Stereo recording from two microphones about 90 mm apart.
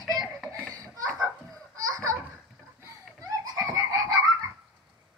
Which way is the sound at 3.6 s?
35° right (ahead or behind).